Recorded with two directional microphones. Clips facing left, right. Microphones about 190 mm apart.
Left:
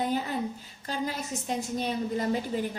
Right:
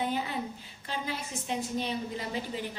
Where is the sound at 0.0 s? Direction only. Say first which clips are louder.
Left 3 dB; 40° left (ahead or behind).